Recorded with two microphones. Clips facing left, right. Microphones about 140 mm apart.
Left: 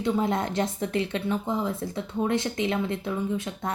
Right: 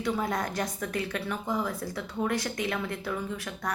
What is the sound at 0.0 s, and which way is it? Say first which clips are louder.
Speech: left 4 dB; 25° left (ahead or behind).